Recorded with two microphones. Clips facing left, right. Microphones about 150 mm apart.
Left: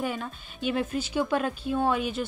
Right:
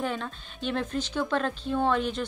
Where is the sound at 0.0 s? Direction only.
5° left (ahead or behind).